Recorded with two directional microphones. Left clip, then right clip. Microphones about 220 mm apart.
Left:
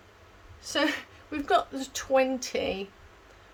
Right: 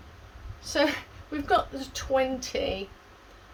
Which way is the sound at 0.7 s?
30° left (ahead or behind).